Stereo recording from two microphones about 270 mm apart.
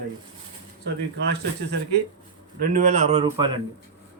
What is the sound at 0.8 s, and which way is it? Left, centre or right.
A man's voice, right.